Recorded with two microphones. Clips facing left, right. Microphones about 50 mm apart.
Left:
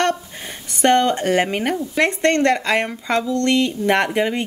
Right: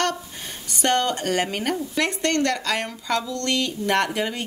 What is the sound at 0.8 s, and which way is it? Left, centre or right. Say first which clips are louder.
Speech: left 6 dB; left.